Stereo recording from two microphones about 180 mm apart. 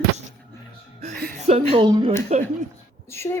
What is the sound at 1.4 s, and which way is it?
Speech, 30° right (ahead or behind).